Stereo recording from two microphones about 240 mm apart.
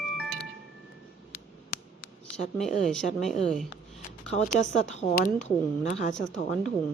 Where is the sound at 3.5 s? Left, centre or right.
Centre.